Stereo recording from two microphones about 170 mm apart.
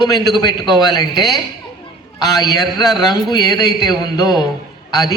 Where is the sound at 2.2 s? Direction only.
20° left (ahead or behind).